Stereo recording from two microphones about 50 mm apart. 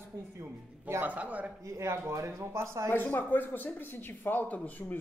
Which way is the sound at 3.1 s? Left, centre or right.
Left.